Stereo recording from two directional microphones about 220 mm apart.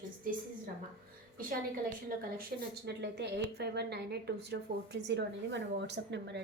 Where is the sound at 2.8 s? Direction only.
50° right (ahead or behind).